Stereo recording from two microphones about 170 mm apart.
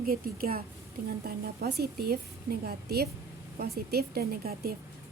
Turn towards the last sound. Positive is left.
turn(degrees=-60)  # may be behind; listen again after turning